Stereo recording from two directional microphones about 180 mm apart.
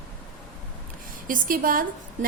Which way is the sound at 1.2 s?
50° right (ahead or behind).